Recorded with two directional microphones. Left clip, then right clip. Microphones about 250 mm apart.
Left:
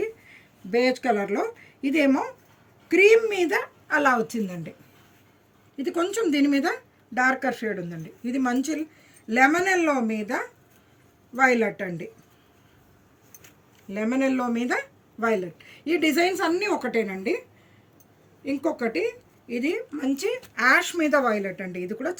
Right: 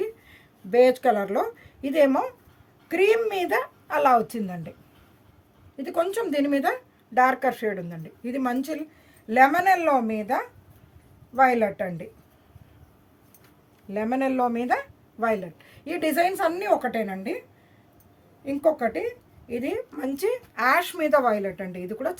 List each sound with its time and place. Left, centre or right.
0.7 s a woman's voice: right
5.7 s a woman's voice: right
13.9 s a woman's voice: right
18.4 s a woman's voice: right